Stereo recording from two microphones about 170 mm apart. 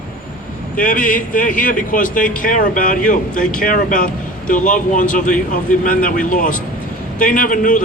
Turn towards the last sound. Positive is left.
turn(degrees=50)  # may be behind; listen again after turning